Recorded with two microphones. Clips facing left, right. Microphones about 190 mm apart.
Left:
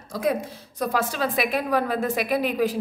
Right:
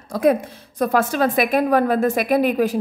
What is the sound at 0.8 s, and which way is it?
A woman's voice, 50° right (ahead or behind).